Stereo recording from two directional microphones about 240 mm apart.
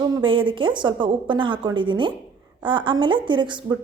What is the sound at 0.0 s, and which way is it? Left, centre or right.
A woman's voice, centre.